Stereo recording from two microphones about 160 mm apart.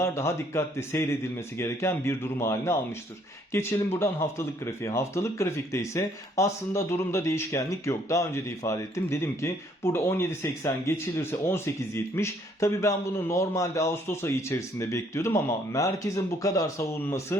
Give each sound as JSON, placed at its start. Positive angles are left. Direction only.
{"t": 0.0, "sound": "speech", "side_deg": 15}